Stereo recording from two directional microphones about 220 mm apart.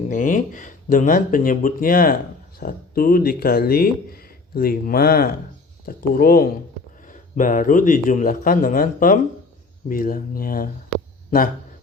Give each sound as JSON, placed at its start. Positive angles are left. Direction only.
{"t": 0.1, "sound": "speech", "side_deg": 35}